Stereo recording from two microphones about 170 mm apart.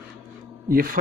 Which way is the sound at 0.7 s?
60° right (ahead or behind).